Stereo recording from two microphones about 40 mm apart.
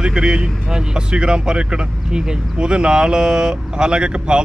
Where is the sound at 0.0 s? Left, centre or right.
Centre.